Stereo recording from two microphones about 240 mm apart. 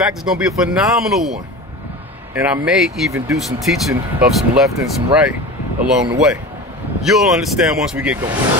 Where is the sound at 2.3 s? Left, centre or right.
Centre.